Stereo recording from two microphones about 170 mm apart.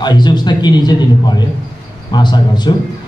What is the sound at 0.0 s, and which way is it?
A man's voice, 25° left (ahead or behind).